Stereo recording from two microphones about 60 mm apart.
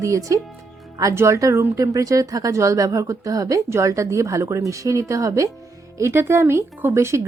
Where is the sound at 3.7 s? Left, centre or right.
Right.